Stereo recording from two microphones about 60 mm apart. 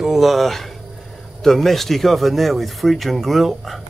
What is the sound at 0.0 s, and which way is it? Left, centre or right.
Speech, centre.